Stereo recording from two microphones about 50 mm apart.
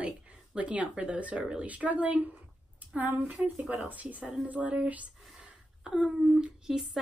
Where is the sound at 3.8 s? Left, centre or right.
Right.